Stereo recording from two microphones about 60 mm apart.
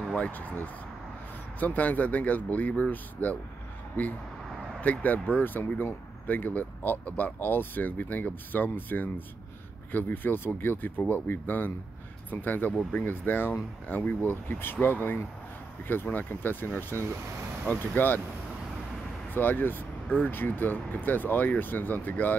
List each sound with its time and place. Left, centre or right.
0.0 s a sound: centre
0.3 s speech: left
19.3 s speech: left